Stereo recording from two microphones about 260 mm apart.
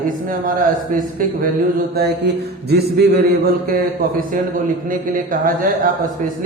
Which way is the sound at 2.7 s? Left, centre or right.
Right.